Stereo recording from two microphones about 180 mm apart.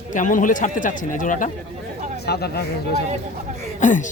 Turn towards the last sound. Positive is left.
turn(degrees=45)  # may be behind; listen again after turning